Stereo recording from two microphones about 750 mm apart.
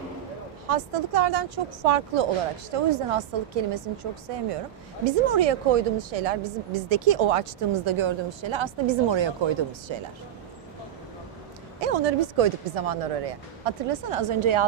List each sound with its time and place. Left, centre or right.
0.7 s a woman's voice: right
11.8 s a woman's voice: right